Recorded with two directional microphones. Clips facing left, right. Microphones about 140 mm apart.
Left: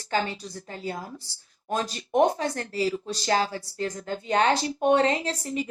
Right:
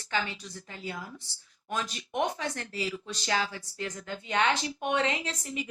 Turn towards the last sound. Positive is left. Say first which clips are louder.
# left 6 dB
turn(degrees=35)  # may be behind; listen again after turning